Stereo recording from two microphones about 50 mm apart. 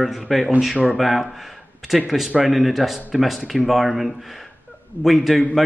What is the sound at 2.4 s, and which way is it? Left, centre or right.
Speech, centre.